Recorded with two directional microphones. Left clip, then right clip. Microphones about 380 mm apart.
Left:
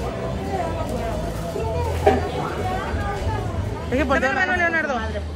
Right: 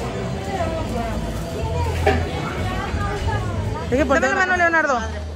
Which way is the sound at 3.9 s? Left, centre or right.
Centre.